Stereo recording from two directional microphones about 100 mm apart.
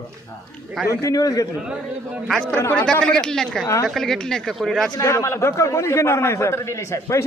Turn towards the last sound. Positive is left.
turn(degrees=30)  # may be behind; listen again after turning